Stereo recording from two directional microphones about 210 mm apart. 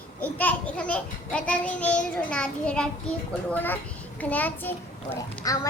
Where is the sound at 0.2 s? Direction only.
5° left (ahead or behind).